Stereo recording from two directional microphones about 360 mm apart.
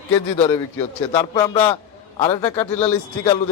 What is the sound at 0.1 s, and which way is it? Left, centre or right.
A man's voice, centre.